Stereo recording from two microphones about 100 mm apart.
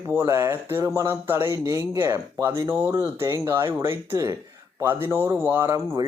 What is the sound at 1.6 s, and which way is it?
Speech, 35° right (ahead or behind).